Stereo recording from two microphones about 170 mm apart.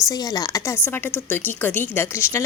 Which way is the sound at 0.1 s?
20° left (ahead or behind).